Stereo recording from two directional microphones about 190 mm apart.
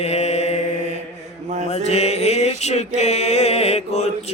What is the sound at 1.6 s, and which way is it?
Mantra, 35° left (ahead or behind).